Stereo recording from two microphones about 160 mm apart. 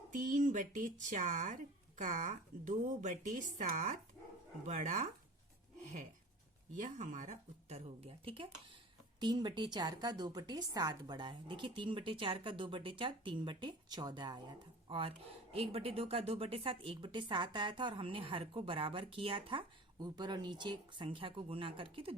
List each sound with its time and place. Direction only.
0.1 s a woman's voice: 50° right (ahead or behind); by 22.1 s 35° right (ahead or behind)